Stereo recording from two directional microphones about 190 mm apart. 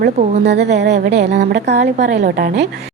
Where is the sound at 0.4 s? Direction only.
65° right (ahead or behind).